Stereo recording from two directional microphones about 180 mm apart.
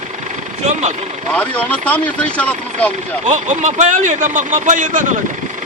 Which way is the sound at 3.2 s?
40° right (ahead or behind).